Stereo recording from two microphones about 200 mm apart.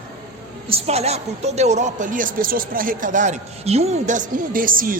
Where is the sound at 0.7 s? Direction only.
30° right (ahead or behind).